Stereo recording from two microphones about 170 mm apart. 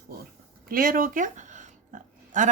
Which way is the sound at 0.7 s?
55° right (ahead or behind).